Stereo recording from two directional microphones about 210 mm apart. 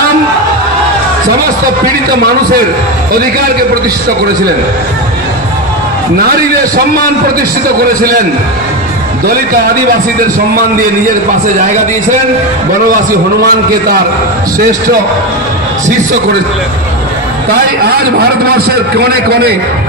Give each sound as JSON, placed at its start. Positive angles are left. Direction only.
{"t": 9.2, "sound": "a man's voice", "side_deg": -45}
{"t": 13.4, "sound": "a man's voice", "side_deg": -45}
{"t": 17.5, "sound": "a man's voice", "side_deg": -45}